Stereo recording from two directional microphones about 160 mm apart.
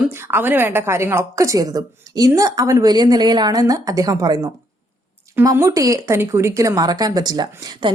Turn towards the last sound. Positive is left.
turn(degrees=-25)  # may be behind; listen again after turning